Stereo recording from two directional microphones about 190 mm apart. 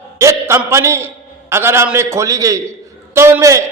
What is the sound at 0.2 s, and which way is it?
A man's voice, 15° right (ahead or behind).